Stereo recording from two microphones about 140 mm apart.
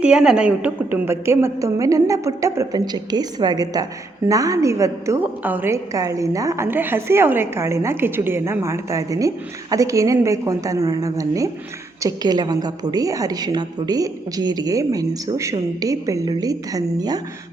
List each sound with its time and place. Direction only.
0.0 s a woman's voice: 5° right (ahead or behind); by 17.2 s 30° right (ahead or behind)